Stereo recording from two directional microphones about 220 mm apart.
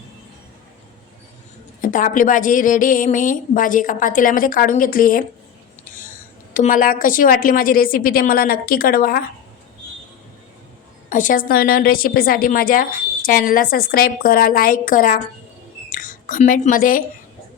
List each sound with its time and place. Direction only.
1.9 s a woman's voice: 35° left (ahead or behind)
6.5 s a woman's voice: 35° left (ahead or behind)
11.1 s a woman's voice: 35° left (ahead or behind)
15.9 s a sound: 40° left (ahead or behind)